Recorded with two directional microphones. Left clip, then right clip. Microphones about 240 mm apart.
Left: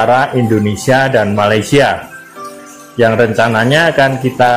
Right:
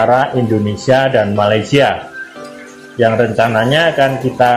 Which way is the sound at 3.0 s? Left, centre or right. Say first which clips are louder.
Left 2 dB; left.